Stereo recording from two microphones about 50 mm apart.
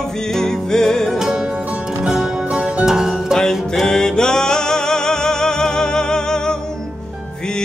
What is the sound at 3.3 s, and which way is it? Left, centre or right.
Music, centre.